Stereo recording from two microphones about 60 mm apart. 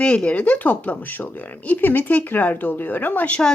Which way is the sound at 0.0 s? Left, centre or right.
Centre.